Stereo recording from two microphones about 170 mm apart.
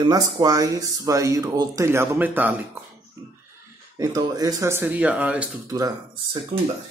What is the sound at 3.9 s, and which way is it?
Speech, 20° right (ahead or behind).